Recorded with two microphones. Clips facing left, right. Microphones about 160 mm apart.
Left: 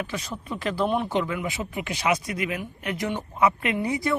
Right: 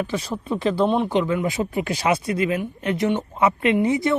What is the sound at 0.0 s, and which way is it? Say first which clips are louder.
Speech: right 6 dB; 30° right (ahead or behind).